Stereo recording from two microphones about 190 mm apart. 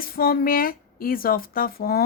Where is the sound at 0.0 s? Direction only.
50° left (ahead or behind).